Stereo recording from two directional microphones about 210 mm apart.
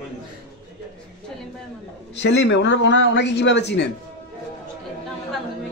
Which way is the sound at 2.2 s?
55° left (ahead or behind).